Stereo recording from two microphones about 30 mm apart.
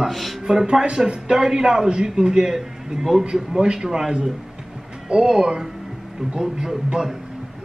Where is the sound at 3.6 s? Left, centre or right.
Right.